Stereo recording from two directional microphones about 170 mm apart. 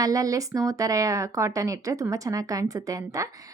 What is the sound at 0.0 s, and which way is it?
A woman's voice, 20° right (ahead or behind).